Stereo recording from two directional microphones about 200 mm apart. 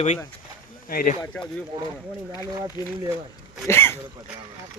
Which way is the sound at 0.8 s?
45° left (ahead or behind).